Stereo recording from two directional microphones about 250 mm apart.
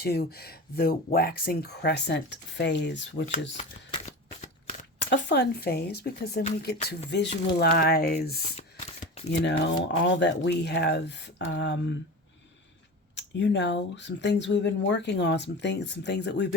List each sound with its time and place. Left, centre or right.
0.0 s speech: left
3.6 s a sound: left
5.0 s speech: left
13.1 s speech: left